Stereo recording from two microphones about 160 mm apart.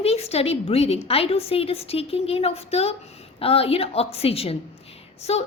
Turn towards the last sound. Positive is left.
turn(degrees=40)  # may be behind; listen again after turning